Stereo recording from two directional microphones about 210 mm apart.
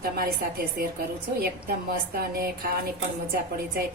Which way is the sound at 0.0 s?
45° right (ahead or behind).